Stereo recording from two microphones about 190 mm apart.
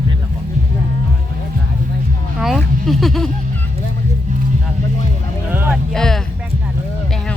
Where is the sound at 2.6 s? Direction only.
Centre (ahead or behind).